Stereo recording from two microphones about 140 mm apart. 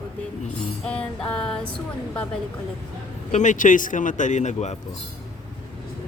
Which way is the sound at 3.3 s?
65° left (ahead or behind).